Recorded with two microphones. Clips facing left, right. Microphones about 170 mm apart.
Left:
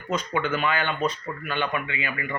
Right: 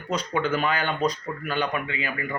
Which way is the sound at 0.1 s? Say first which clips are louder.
Right 1 dB; 35° right (ahead or behind).